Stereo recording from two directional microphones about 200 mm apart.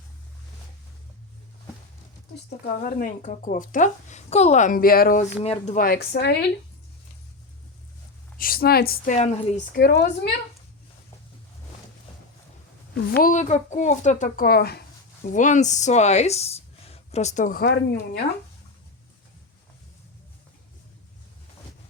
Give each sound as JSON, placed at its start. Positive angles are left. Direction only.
{"t": 2.8, "sound": "a woman's voice", "side_deg": 40}
{"t": 5.4, "sound": "speech", "side_deg": 35}
{"t": 8.4, "sound": "a woman's voice", "side_deg": 45}
{"t": 9.1, "sound": "a woman's voice", "side_deg": 30}
{"t": 9.7, "sound": "speech", "side_deg": 50}
{"t": 12.9, "sound": "a woman's voice", "side_deg": 55}
{"t": 13.3, "sound": "speech", "side_deg": 35}